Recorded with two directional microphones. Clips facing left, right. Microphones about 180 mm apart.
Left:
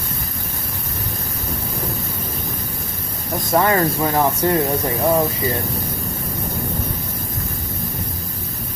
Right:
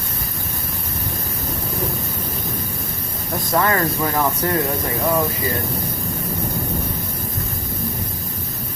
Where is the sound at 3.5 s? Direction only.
25° left (ahead or behind).